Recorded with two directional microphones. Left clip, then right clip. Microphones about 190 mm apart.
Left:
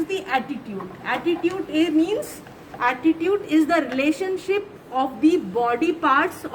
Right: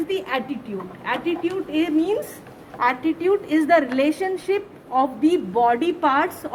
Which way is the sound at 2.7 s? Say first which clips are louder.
Even; 35° right (ahead or behind).